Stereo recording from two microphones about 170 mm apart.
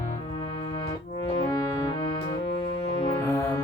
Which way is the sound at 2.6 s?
35° left (ahead or behind).